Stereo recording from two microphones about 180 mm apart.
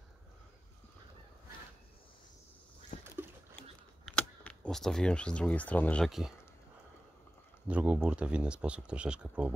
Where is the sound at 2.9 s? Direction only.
35° left (ahead or behind).